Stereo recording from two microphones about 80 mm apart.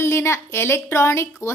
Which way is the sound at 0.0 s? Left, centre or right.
Left.